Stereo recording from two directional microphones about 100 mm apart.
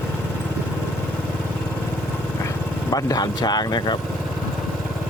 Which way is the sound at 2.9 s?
40° left (ahead or behind).